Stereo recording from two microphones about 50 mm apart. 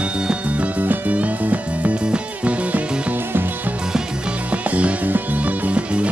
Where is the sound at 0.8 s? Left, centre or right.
Right.